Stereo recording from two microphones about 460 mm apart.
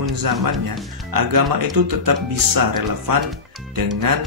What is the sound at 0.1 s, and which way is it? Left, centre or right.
Speech, right.